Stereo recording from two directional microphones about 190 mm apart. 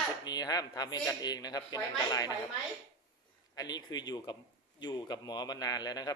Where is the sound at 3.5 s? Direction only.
20° left (ahead or behind).